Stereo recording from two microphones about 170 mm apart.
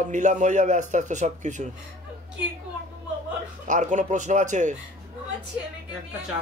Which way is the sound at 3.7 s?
45° right (ahead or behind).